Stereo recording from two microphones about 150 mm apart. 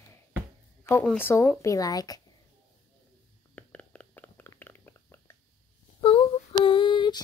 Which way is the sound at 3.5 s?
10° left (ahead or behind).